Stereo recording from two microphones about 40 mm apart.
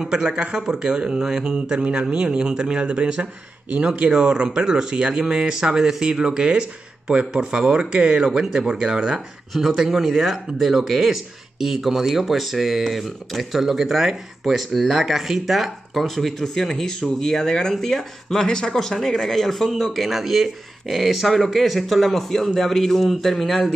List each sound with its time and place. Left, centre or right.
0.0 s speech: centre
9.5 s speech: centre